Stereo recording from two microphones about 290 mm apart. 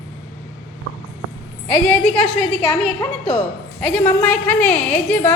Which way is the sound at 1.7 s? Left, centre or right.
Centre.